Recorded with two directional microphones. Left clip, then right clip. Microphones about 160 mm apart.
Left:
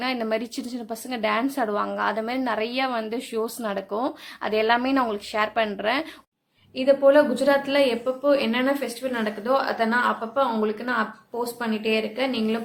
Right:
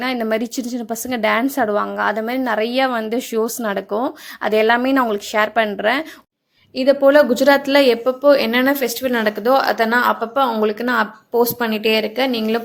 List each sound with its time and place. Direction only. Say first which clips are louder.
0.0 s a woman's voice: right 6 dB; 30° right (ahead or behind)
6.7 s a woman's voice: right 5 dB; 45° right (ahead or behind)